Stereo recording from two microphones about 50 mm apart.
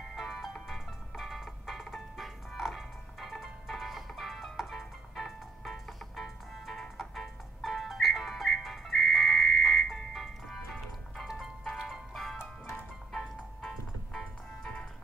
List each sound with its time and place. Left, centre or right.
0.1 s music: centre
12.4 s music: left
13.6 s music: centre